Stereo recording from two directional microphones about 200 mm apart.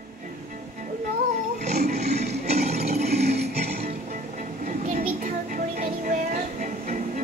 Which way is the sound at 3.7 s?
45° right (ahead or behind).